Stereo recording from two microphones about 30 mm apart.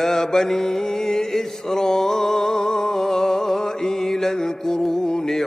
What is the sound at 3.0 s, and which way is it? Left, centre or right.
Music, centre.